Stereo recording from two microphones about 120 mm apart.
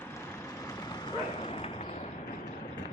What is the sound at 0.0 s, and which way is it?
Vehicle, 20° left (ahead or behind).